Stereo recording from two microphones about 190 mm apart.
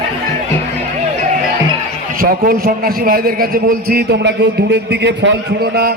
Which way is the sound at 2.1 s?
50° right (ahead or behind).